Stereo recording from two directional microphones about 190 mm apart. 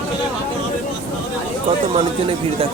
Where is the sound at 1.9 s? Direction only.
30° right (ahead or behind).